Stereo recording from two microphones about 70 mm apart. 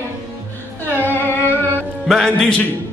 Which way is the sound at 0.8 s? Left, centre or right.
Left.